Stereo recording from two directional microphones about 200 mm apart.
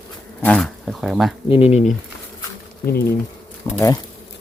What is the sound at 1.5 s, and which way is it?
Speech, 30° left (ahead or behind).